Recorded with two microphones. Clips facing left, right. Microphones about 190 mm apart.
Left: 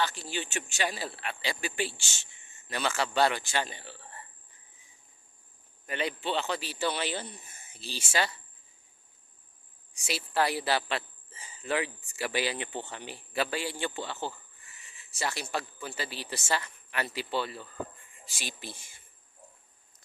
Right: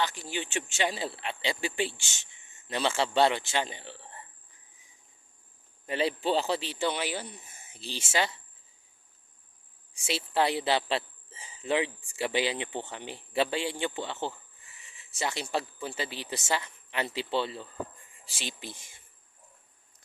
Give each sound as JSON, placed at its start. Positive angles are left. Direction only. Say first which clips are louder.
{"t": 0.0, "sound": "speech", "louder": "even", "side_deg": -15}
{"t": 4.0, "sound": "a sound", "louder": "right 1 dB", "side_deg": -20}
{"t": 5.8, "sound": "speech", "louder": "right 4 dB", "side_deg": -30}
{"t": 9.9, "sound": "speech", "louder": "right 2 dB", "side_deg": -25}